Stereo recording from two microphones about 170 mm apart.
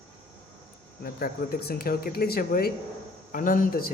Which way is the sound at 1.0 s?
60° left (ahead or behind).